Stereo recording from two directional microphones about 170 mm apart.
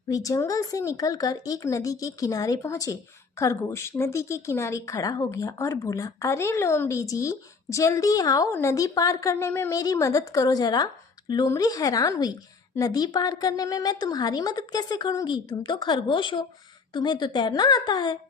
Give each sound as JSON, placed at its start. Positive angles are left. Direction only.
{"t": 0.1, "sound": "speech", "side_deg": 20}